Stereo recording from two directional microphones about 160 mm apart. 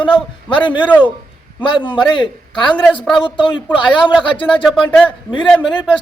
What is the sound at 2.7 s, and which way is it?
Speech, 10° left (ahead or behind).